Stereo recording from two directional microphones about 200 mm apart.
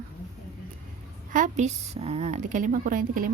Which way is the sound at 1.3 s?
40° right (ahead or behind).